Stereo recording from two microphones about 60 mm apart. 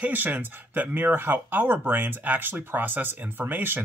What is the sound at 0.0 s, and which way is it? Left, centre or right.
Speech, right.